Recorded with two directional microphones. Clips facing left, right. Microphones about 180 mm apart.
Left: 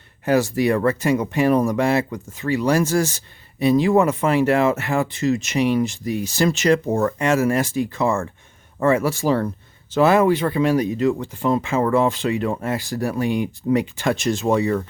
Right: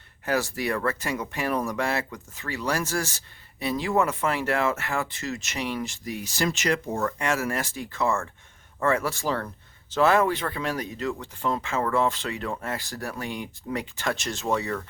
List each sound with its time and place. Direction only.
0.3 s speech: 20° left (ahead or behind)